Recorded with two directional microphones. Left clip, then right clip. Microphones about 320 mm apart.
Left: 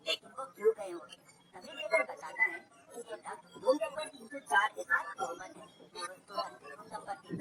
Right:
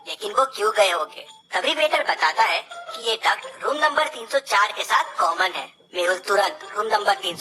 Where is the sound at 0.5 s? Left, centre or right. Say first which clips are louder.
Right 8 dB; right.